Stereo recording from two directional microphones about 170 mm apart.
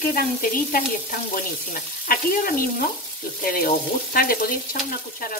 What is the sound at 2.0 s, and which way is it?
Frying, 60° left (ahead or behind).